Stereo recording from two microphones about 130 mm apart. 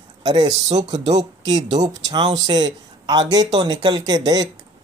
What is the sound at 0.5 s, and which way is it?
Speech, 30° right (ahead or behind).